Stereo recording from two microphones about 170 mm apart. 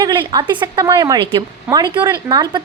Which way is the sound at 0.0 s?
25° right (ahead or behind).